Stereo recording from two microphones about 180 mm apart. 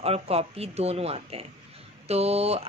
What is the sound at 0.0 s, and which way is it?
Speech, 35° right (ahead or behind).